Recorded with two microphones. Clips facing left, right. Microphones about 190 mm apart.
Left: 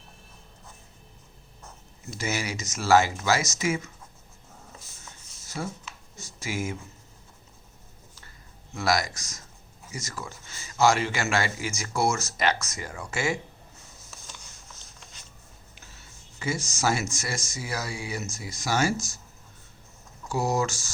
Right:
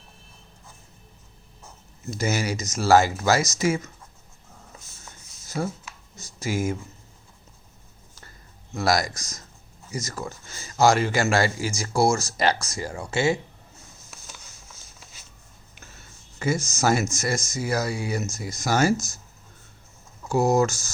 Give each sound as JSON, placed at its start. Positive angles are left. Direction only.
{"t": 2.0, "sound": "a man's voice", "side_deg": -40}
{"t": 5.6, "sound": "a man's voice", "side_deg": -45}
{"t": 8.7, "sound": "a man's voice", "side_deg": -40}
{"t": 14.8, "sound": "a sound", "side_deg": -5}
{"t": 15.7, "sound": "a sound", "side_deg": -45}
{"t": 17.2, "sound": "speech", "side_deg": -45}
{"t": 20.3, "sound": "speech", "side_deg": -45}